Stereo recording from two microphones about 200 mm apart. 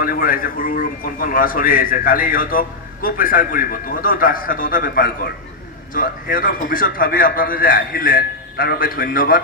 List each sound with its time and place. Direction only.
0.0 s a man's voice: 45° left (ahead or behind)